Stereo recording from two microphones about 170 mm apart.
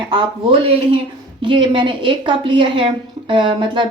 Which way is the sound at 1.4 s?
30° right (ahead or behind).